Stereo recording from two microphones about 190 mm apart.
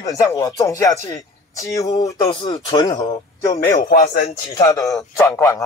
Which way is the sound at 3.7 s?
50° left (ahead or behind).